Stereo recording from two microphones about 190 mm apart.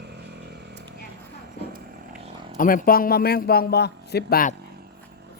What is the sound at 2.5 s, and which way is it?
A man's voice, 45° left (ahead or behind).